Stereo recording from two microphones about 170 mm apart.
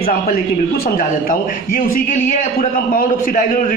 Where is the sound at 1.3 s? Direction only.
55° left (ahead or behind).